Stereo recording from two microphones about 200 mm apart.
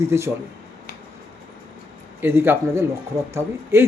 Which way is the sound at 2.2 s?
10° right (ahead or behind).